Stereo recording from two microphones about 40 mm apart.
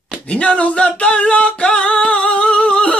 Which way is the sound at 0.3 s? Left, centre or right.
Left.